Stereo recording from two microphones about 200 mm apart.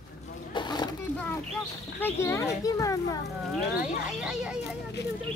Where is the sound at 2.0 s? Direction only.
15° left (ahead or behind).